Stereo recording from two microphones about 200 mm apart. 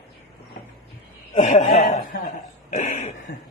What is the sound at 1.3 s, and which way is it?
Speech, 35° left (ahead or behind).